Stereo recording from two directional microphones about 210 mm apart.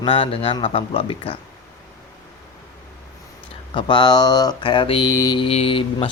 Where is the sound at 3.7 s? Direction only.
25° left (ahead or behind).